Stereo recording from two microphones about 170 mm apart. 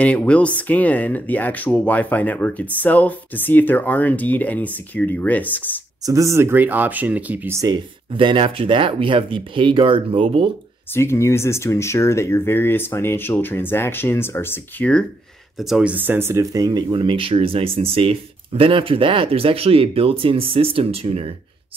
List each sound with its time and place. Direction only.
0.0 s speech: 10° left (ahead or behind)
6.0 s speech: 20° right (ahead or behind)
8.2 s speech: 30° right (ahead or behind)
11.0 s speech: 15° left (ahead or behind); by 21.3 s 35° right (ahead or behind)